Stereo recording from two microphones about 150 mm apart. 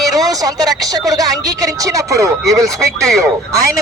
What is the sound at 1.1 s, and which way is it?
Speech, 25° right (ahead or behind).